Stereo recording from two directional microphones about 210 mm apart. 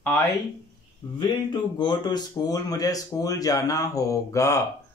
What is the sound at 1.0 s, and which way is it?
Speech, 20° left (ahead or behind).